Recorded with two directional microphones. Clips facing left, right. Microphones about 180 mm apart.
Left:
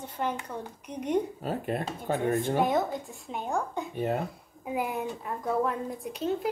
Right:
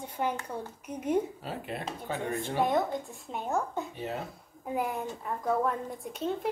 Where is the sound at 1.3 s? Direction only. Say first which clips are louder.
Left 6 dB; 45° left (ahead or behind).